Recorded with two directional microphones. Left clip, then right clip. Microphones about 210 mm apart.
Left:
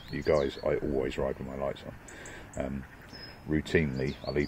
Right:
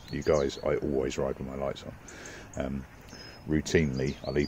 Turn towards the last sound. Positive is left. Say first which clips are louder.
# right 1 dB
turn(degrees=-10)  # may be behind; listen again after turning